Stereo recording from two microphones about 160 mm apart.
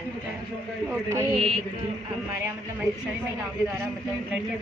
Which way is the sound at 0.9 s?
15° right (ahead or behind).